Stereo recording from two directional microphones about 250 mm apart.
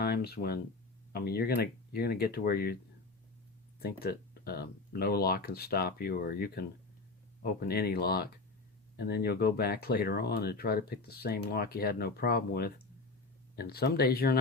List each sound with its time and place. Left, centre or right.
0.0 s speech: left
3.8 s speech: left
7.7 s speech: left